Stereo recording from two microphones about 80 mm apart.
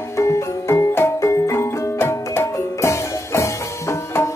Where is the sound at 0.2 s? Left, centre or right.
Left.